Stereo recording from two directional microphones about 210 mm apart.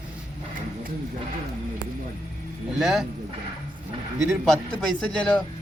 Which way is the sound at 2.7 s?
Centre (ahead or behind).